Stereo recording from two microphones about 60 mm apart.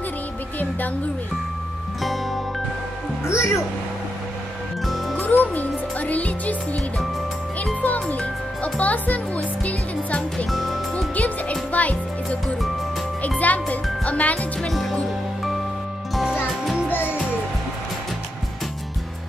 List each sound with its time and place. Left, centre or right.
2.0 s music: centre
3.3 s speech: left
5.1 s music: left
7.8 s music: left
10.3 s music: centre
11.1 s music: left
14.7 s music: centre
16.9 s music: left